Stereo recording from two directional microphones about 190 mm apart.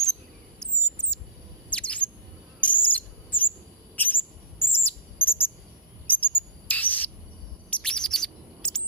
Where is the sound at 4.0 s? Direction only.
10° left (ahead or behind).